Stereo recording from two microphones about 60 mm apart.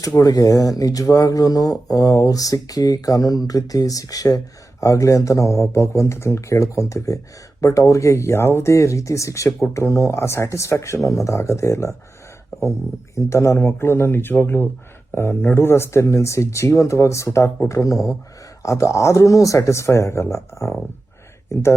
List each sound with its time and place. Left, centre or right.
0.2 s speech: left
4.8 s speech: left
12.5 s a sound: left
13.1 s speech: left
17.7 s speech: left
18.6 s speech: left
21.5 s speech: left